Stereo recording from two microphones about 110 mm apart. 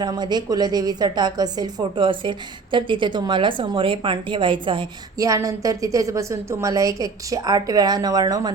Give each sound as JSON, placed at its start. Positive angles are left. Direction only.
{"t": 0.0, "sound": "a woman's voice", "side_deg": -40}
{"t": 5.1, "sound": "a woman's voice", "side_deg": -30}